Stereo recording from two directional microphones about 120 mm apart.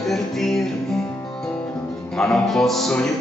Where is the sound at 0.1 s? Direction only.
Centre (ahead or behind).